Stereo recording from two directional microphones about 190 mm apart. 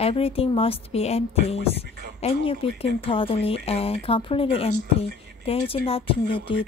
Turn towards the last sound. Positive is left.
turn(degrees=30)  # may be behind; listen again after turning